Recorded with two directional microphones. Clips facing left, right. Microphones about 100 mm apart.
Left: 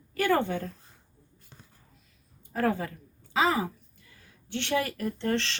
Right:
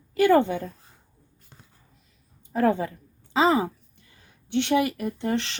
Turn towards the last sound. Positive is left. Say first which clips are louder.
# right 2 dB
turn(degrees=-15)  # may be behind; listen again after turning